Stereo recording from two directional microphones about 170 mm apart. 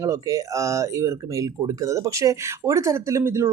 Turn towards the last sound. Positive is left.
turn(degrees=-15)  # may be behind; listen again after turning